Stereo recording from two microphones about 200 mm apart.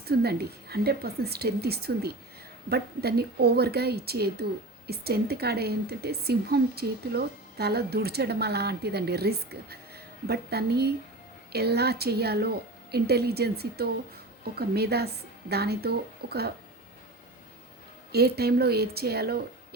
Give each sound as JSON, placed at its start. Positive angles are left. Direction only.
{"t": 0.0, "sound": "a woman's voice", "side_deg": -55}
{"t": 18.1, "sound": "a woman's voice", "side_deg": -55}